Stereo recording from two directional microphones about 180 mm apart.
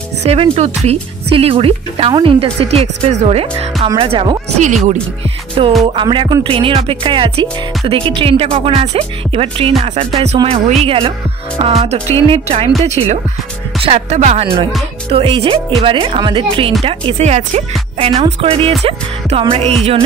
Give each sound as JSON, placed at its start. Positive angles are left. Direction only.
{"t": 0.2, "sound": "speech", "side_deg": -35}
{"t": 5.6, "sound": "music", "side_deg": -25}
{"t": 10.1, "sound": "speech", "side_deg": -30}
{"t": 15.0, "sound": "music", "side_deg": -30}
{"t": 16.8, "sound": "speech", "side_deg": -35}